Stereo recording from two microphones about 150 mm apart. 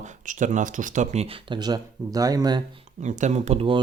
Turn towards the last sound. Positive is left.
turn(degrees=-45)  # may be behind; listen again after turning